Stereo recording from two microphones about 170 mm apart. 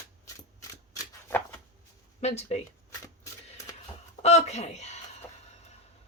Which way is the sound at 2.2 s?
40° left (ahead or behind).